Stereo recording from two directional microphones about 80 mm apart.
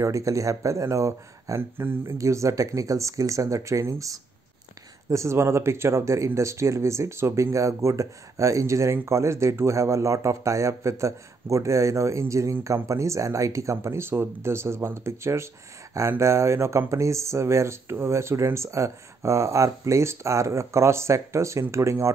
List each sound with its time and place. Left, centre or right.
0.0 s speech: right
2.1 s speech: right